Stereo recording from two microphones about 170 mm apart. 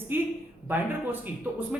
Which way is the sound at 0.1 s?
10° right (ahead or behind).